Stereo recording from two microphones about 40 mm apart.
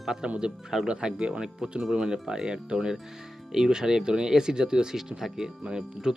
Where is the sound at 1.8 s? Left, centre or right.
Centre.